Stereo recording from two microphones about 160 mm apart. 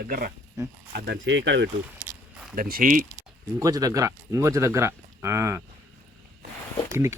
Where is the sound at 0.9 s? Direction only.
85° right.